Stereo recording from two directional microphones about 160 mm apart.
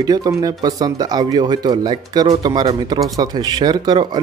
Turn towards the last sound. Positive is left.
turn(degrees=-25)  # may be behind; listen again after turning